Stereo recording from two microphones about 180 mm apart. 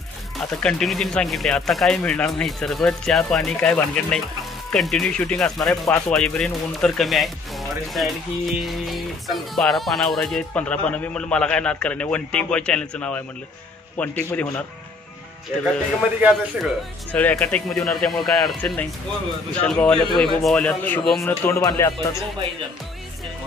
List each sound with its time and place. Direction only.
0.5 s a man's voice: 5° left (ahead or behind)
16.2 s speech: 5° right (ahead or behind)
17.1 s a man's voice: 10° left (ahead or behind)